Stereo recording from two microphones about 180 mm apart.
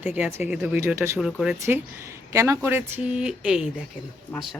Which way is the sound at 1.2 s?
5° right (ahead or behind).